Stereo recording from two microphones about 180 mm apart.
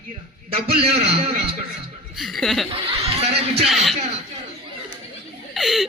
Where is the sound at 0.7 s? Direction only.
35° right (ahead or behind).